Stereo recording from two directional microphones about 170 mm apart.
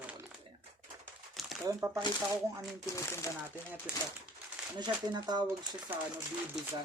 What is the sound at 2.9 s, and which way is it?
Speech, 15° left (ahead or behind).